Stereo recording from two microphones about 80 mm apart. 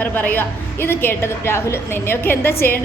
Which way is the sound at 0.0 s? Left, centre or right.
Left.